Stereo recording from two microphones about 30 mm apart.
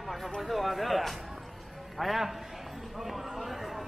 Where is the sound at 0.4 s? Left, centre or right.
Centre.